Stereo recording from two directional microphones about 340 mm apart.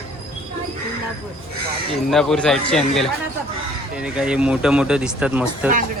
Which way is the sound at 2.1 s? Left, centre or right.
Centre.